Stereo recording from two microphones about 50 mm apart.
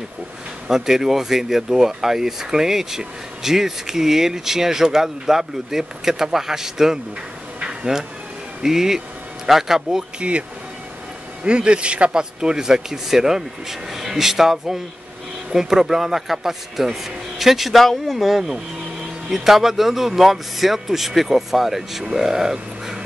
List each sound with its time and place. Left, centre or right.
0.7 s speech: centre
7.6 s bee: centre
8.6 s speech: centre
11.4 s speech: centre